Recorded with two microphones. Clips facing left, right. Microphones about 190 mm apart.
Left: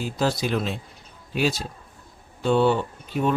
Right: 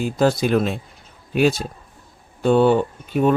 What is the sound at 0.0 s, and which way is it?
Speech, 50° right (ahead or behind).